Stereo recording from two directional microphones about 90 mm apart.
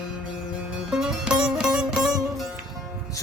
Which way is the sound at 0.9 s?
5° right (ahead or behind).